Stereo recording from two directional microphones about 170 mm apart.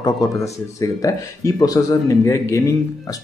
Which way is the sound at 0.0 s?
20° left (ahead or behind).